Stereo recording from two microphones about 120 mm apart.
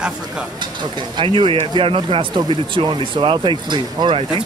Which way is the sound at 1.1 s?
45° right (ahead or behind).